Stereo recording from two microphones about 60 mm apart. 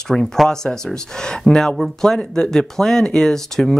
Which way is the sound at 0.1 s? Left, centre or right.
Centre.